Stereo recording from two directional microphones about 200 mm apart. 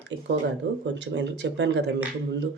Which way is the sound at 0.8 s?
65° right (ahead or behind).